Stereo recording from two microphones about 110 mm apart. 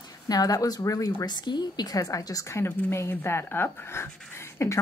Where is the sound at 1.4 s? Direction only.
40° left (ahead or behind).